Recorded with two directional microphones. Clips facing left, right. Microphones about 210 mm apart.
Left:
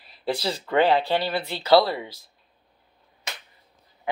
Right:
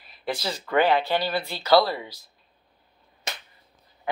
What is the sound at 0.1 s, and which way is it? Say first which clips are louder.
Speech: left 3 dB; 30° left (ahead or behind).